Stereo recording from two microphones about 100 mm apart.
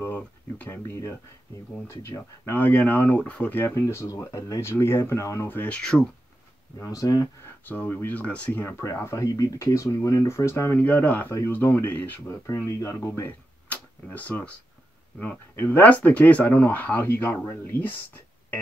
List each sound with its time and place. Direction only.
0.0 s speech: 20° left (ahead or behind)
5.6 s speech: 10° left (ahead or behind)
6.8 s speech: 35° left (ahead or behind)
7.6 s speech: 15° left (ahead or behind)
12.7 s speech: 30° left (ahead or behind)
13.7 s tick-tock: 15° left (ahead or behind)
15.1 s speech: 20° left (ahead or behind)